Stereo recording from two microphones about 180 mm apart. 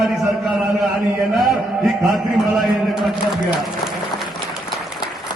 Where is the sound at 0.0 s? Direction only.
Centre (ahead or behind).